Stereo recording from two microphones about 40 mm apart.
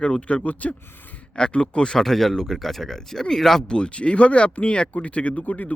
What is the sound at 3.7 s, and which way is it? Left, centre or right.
Speech, left.